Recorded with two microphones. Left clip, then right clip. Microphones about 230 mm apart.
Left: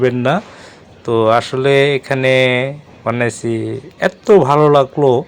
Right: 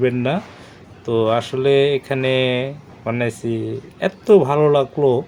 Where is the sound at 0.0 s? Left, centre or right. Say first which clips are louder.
Left 5 dB; centre.